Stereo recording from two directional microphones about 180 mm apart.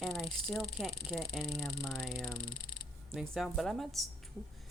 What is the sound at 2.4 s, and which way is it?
Speech, 50° left (ahead or behind).